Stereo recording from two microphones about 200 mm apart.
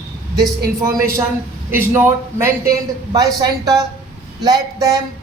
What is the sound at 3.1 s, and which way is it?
Speech, 20° right (ahead or behind).